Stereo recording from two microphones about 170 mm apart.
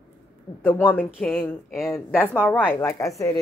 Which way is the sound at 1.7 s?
Centre (ahead or behind).